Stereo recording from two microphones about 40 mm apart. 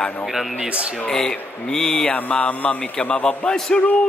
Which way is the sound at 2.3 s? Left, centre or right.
Left.